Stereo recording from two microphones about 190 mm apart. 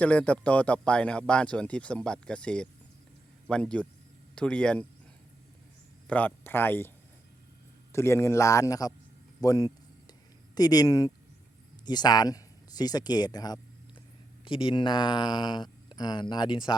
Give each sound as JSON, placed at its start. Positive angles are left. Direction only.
{"t": 0.0, "sound": "speech", "side_deg": 5}
{"t": 6.1, "sound": "a man's voice", "side_deg": 10}
{"t": 7.9, "sound": "a man's voice", "side_deg": 15}